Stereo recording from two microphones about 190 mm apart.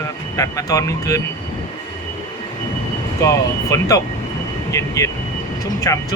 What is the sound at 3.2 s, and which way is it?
Speech, 15° left (ahead or behind).